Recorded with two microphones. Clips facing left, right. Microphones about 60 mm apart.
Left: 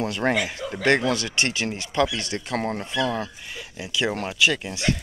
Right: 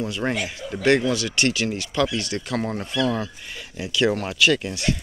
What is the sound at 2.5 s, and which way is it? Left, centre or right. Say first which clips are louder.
Speech: even; left.